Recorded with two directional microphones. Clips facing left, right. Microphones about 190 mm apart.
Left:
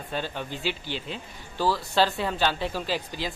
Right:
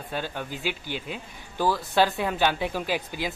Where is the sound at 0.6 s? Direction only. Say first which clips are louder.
Left 1 dB; 50° right (ahead or behind).